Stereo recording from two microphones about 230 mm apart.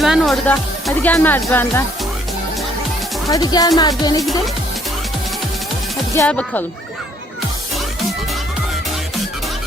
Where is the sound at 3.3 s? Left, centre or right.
Centre.